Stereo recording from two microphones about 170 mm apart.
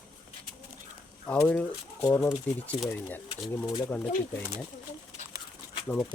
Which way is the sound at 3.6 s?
25° left (ahead or behind).